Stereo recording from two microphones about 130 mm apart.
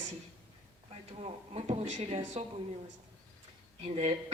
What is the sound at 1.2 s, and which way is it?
Speech, 55° right (ahead or behind).